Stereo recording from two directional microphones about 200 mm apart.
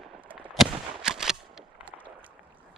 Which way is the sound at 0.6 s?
Centre (ahead or behind).